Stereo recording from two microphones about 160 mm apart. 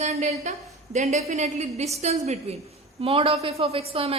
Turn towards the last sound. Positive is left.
turn(degrees=-35)  # may be behind; listen again after turning